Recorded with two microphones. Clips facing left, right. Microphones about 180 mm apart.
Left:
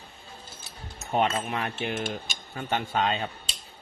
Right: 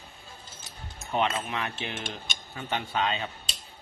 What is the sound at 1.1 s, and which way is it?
Speech, 45° left (ahead or behind).